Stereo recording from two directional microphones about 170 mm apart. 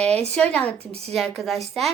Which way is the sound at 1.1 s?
Centre (ahead or behind).